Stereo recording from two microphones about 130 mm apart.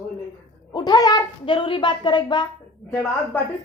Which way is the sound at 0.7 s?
35° left (ahead or behind).